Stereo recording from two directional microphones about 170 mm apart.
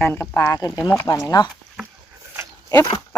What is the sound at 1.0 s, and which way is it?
Speech, 20° left (ahead or behind).